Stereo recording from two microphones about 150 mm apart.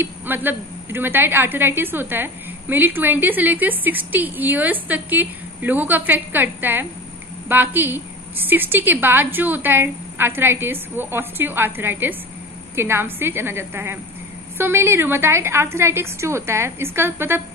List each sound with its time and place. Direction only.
0.0 s a woman's voice: 15° right (ahead or behind)